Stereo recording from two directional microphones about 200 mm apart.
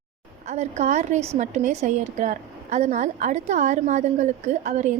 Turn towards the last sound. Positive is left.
turn(degrees=-35)  # may be behind; listen again after turning